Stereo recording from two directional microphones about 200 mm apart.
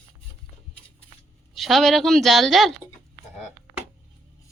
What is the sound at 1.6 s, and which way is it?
Speech, centre (ahead or behind).